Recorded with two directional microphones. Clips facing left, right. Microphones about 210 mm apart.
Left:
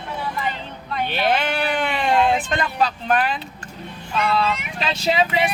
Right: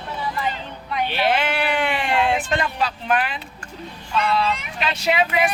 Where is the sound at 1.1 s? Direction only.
45° left (ahead or behind).